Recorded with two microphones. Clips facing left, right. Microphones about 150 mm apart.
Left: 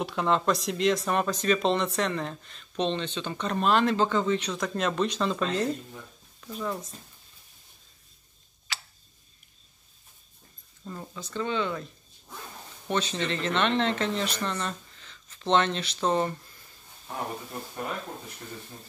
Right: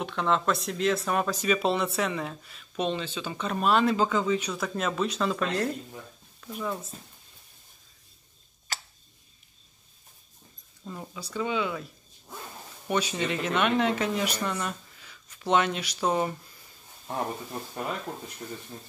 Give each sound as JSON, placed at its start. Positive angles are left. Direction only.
{"t": 0.0, "sound": "speech", "side_deg": 5}
{"t": 8.7, "sound": "tick-tock", "side_deg": -45}
{"t": 10.9, "sound": "speech", "side_deg": -10}